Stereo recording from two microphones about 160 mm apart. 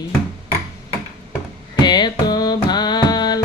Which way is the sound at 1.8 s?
25° left (ahead or behind).